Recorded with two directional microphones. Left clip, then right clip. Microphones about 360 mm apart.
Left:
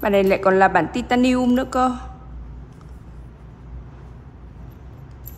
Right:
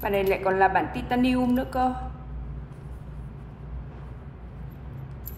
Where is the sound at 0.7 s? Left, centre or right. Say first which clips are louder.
Left 6 dB; centre.